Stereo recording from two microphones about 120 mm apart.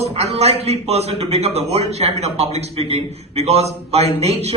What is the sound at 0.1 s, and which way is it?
A man's voice, 60° right (ahead or behind).